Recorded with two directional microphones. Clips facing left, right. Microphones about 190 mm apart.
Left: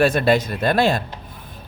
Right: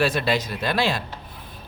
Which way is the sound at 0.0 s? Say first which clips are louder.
Left 6 dB; 50° left (ahead or behind).